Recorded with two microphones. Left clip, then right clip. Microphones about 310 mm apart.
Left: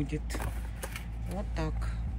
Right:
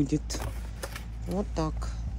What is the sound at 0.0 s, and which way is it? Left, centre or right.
Speech, centre.